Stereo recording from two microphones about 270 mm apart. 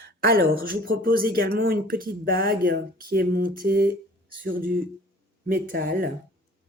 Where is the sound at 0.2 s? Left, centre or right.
Right.